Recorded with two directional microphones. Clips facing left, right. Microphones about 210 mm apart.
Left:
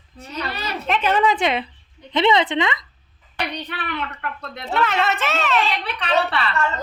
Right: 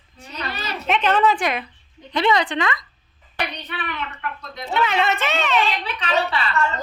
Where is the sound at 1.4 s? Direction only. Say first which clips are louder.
Left 3 dB; 25° left (ahead or behind).